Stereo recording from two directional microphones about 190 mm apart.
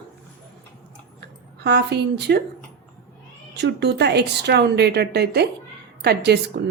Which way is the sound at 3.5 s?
65° right (ahead or behind).